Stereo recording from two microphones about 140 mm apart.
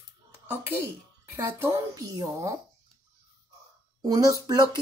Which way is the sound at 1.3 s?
15° right (ahead or behind).